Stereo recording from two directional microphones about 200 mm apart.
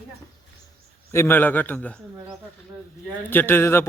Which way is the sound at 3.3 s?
10° left (ahead or behind).